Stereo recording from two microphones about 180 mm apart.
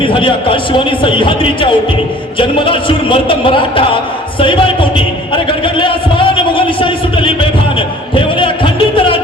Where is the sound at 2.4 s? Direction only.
30° left (ahead or behind).